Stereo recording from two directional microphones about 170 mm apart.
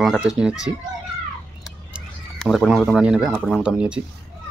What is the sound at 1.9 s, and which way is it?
Speech, centre (ahead or behind).